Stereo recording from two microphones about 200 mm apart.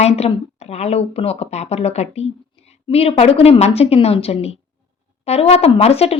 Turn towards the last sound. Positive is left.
turn(degrees=30)  # may be behind; listen again after turning